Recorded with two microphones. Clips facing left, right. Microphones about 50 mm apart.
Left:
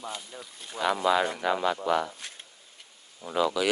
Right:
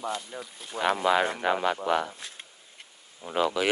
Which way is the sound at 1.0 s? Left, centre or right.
Right.